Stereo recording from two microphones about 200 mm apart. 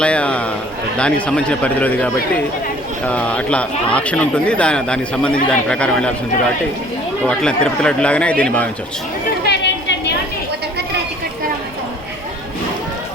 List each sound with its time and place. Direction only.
0.0 s speech: 5° left (ahead or behind)
7.3 s speech: 5° left (ahead or behind)
9.5 s a sound: 55° left (ahead or behind)